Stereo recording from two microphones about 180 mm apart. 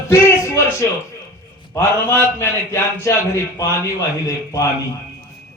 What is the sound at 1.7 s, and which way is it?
Music, 15° left (ahead or behind).